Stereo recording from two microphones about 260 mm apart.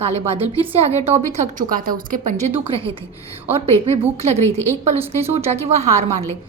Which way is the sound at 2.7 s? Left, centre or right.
Right.